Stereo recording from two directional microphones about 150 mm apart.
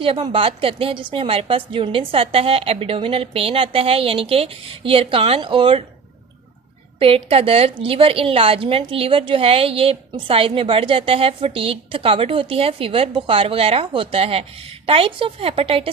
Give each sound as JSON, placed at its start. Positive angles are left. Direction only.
{"t": 0.0, "sound": "a woman's voice", "side_deg": -35}
{"t": 7.0, "sound": "a woman's voice", "side_deg": -40}